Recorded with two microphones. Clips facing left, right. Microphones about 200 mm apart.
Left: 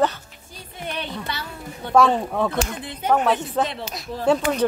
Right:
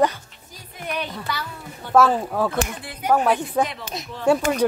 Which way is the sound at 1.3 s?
25° left (ahead or behind).